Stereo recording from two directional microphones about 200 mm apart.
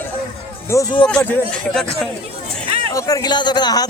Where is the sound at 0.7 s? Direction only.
15° left (ahead or behind).